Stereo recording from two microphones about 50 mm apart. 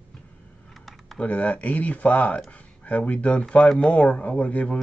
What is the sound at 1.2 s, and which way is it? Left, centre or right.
Speech, left.